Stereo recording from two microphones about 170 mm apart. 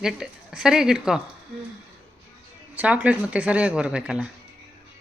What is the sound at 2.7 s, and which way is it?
Speech, 10° right (ahead or behind).